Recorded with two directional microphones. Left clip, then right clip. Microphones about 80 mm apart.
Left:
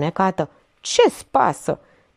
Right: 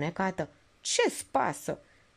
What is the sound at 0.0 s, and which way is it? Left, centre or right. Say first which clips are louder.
Speech: left 11 dB; left.